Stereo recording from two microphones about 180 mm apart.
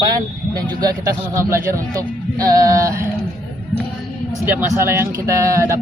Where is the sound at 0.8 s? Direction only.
20° right (ahead or behind).